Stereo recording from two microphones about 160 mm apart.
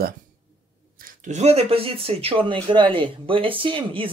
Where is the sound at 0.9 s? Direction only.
55° right (ahead or behind).